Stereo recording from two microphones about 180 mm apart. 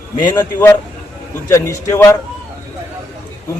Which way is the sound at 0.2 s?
20° left (ahead or behind).